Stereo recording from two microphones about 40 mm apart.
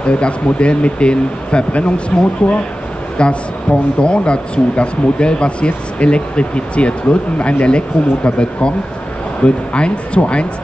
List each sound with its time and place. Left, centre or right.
0.0 s speech: left